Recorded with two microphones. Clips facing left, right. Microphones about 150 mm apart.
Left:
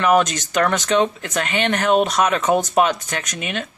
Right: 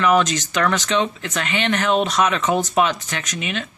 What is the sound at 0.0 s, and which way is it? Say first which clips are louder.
Speech: left 1 dB; 50° left (ahead or behind).